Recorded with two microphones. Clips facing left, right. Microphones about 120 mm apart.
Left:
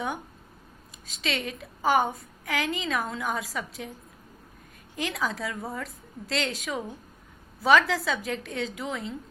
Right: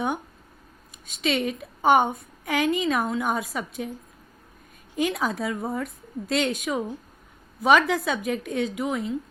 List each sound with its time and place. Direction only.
1.2 s a woman's voice: 25° right (ahead or behind)
4.9 s a woman's voice: 25° right (ahead or behind)